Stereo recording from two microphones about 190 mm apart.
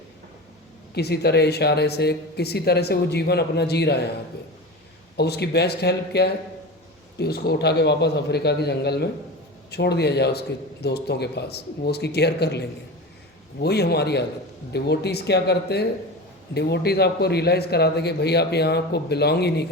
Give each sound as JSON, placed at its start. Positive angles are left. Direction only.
{"t": 0.9, "sound": "speech", "side_deg": 55}
{"t": 5.1, "sound": "speech", "side_deg": 60}